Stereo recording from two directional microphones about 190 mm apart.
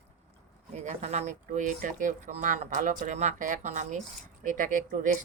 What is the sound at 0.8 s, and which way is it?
Speech, 35° right (ahead or behind).